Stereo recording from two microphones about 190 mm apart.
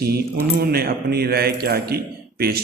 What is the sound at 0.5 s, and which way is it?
A man's voice, 55° right (ahead or behind).